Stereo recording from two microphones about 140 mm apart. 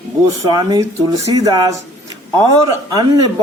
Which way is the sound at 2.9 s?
25° right (ahead or behind).